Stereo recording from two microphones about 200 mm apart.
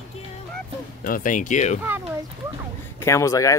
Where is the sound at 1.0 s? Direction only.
45° left (ahead or behind).